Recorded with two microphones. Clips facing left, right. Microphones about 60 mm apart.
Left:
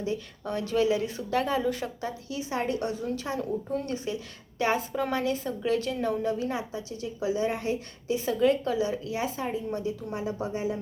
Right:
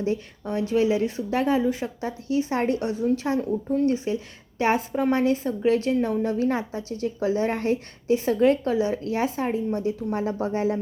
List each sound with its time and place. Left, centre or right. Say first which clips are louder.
0.4 s speech: right 3 dB; right
2.8 s a woman's voice: right 7 dB; right
10.4 s music: right 6 dB; right